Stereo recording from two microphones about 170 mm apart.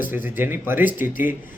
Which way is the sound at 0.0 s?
10° right (ahead or behind).